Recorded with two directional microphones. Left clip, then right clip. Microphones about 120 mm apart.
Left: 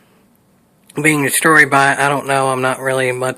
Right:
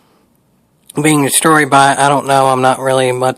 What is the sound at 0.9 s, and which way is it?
Speech, 45° right (ahead or behind).